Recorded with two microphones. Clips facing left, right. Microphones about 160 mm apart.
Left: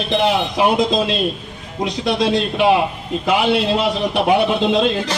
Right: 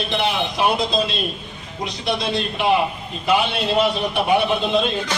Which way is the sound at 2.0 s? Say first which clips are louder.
Left 5 dB; 90° left.